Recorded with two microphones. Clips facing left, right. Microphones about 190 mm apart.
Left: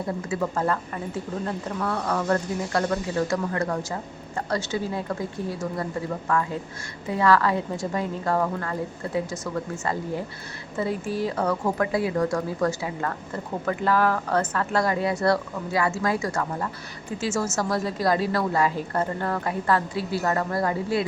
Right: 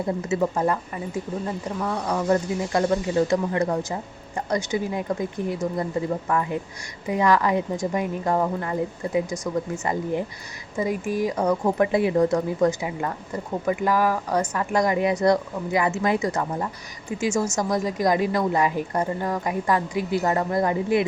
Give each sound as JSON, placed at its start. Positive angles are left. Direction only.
{"t": 0.3, "sound": "speech", "side_deg": -20}